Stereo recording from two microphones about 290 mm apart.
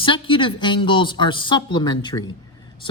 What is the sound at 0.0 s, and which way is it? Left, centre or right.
Speech, centre.